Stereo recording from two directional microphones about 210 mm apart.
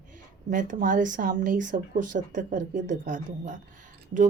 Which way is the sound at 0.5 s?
40° right (ahead or behind).